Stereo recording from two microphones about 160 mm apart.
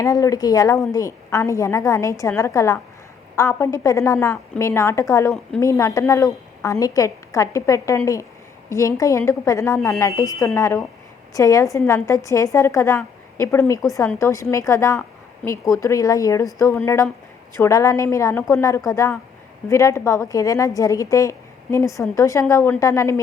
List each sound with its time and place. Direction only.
0.0 s a woman's voice: 20° left (ahead or behind)